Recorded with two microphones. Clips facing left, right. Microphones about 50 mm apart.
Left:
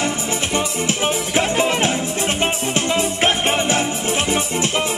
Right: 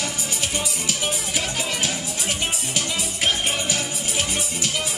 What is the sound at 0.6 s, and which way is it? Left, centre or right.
Music, left.